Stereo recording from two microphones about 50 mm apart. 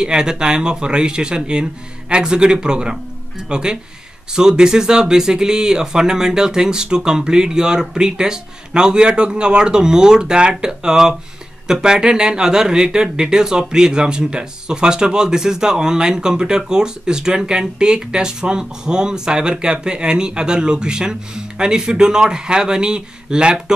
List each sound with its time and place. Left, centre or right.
0.0 s speech: centre